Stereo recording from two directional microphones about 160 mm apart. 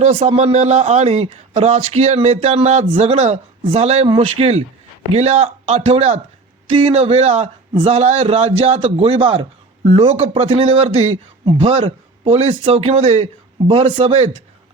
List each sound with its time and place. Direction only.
0.0 s a man's voice: 40° right (ahead or behind)